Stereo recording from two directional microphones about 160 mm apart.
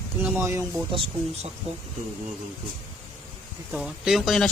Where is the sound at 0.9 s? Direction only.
35° right (ahead or behind).